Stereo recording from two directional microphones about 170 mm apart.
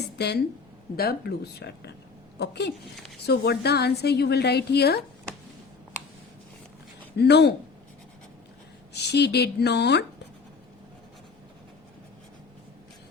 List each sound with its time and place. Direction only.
0.2 s a woman's voice: 80° left
0.9 s a woman's voice: 65° left (ahead or behind)
7.2 s a woman's voice: 80° left
8.9 s a woman's voice: 80° left